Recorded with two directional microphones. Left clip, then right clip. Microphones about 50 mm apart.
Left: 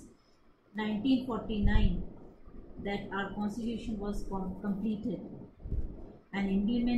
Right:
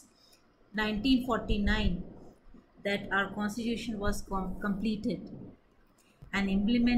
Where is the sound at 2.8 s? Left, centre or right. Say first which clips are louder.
Right 6 dB; right.